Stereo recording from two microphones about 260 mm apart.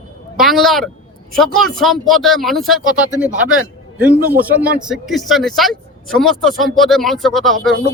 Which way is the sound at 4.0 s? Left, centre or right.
Centre.